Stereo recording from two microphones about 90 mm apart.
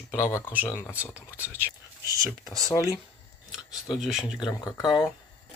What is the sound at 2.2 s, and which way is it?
Speech, 45° left (ahead or behind).